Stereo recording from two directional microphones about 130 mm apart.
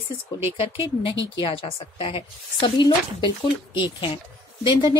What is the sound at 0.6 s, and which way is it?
A woman's voice, 45° left (ahead or behind).